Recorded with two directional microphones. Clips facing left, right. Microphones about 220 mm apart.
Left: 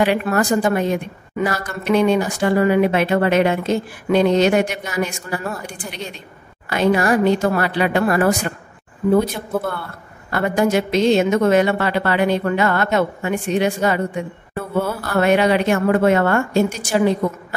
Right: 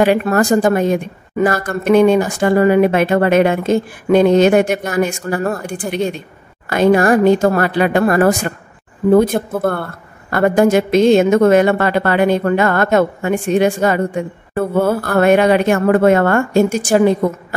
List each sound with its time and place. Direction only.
0.0 s a woman's voice: 45° right (ahead or behind)